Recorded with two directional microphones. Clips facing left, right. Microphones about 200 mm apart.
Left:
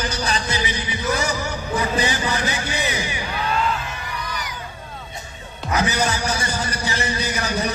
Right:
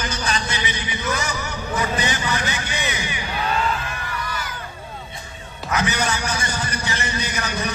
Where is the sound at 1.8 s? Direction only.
30° left (ahead or behind).